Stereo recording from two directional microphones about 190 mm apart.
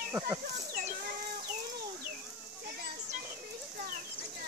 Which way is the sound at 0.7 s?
45° right (ahead or behind).